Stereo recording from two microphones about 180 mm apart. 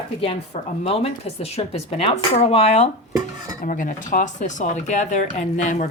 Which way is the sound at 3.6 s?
45° left (ahead or behind).